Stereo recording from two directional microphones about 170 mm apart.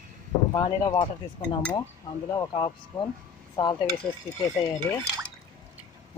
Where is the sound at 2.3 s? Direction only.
25° left (ahead or behind).